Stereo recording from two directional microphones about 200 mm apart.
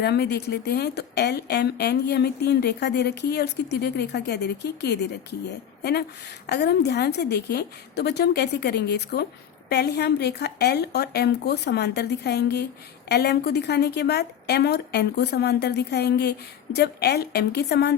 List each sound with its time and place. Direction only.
0.0 s a woman's voice: 55° left (ahead or behind)